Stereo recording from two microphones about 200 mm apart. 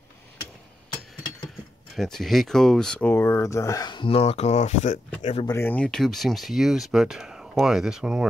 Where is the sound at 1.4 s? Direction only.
Centre (ahead or behind); by 5.4 s 30° left (ahead or behind).